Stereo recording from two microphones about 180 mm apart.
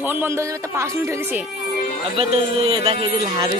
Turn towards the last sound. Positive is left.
turn(degrees=-25)  # may be behind; listen again after turning